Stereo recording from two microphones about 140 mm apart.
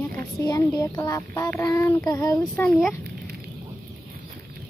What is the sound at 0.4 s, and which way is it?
Speech, 25° left (ahead or behind).